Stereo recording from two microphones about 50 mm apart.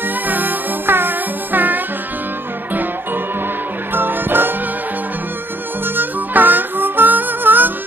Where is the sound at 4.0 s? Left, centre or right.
Right.